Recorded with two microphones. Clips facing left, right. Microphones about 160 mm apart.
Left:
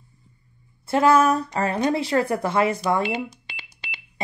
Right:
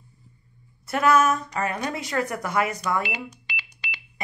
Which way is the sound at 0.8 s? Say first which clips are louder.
Left 3 dB; 30° left (ahead or behind).